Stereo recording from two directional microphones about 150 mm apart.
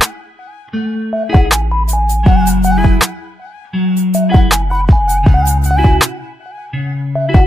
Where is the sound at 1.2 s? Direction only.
Centre (ahead or behind).